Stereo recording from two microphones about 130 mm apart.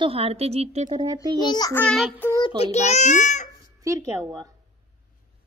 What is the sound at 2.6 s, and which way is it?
Speech, 55° left (ahead or behind).